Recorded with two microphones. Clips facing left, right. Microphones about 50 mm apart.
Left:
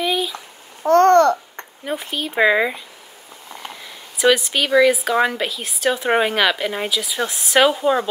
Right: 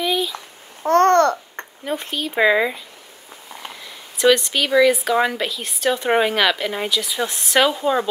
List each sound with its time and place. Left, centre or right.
0.0 s babbling: centre
0.8 s babbling: right
1.9 s speech: centre
4.2 s a woman's voice: centre